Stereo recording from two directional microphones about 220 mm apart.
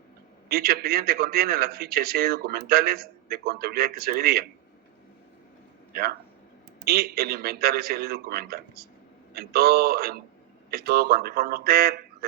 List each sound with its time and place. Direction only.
0.4 s a man's voice: 45° right (ahead or behind)
5.9 s a man's voice: 45° right (ahead or behind)